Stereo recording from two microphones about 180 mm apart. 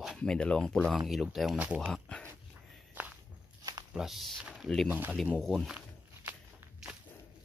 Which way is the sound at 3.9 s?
Centre (ahead or behind).